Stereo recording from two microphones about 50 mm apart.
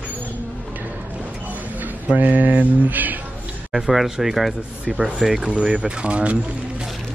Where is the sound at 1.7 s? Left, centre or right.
Right.